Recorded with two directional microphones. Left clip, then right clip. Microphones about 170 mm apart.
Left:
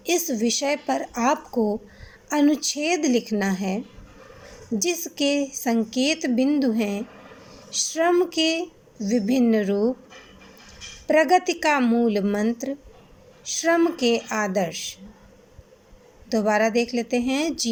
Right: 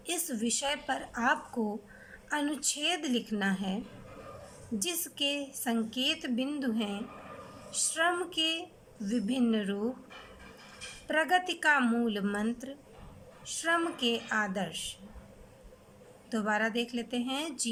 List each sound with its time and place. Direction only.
0.0 s a woman's voice: 25° left (ahead or behind)
4.8 s a woman's voice: 25° left (ahead or behind)
11.1 s a woman's voice: 25° left (ahead or behind)
16.3 s a woman's voice: 25° left (ahead or behind)